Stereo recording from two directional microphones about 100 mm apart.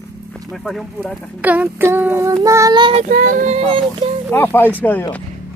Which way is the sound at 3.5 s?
90° right.